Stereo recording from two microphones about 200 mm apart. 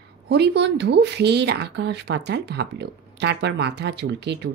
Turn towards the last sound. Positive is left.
turn(degrees=-60)  # may be behind; listen again after turning